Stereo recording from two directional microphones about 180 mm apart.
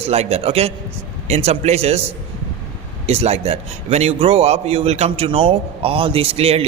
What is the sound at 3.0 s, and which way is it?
A man's voice, 35° right (ahead or behind).